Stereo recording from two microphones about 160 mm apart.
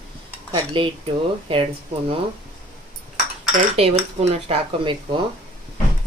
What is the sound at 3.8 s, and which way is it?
Speech, 40° right (ahead or behind).